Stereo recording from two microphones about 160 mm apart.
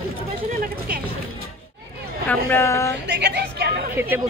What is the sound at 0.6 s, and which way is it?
Speech, 70° right (ahead or behind).